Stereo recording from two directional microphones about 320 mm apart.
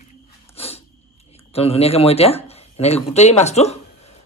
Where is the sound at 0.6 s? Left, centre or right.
Centre.